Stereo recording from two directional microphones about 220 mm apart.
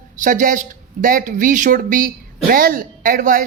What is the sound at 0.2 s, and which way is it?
A man's voice, 35° right (ahead or behind).